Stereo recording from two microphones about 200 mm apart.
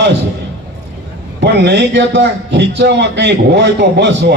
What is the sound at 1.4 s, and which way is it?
A man's voice, 60° right (ahead or behind).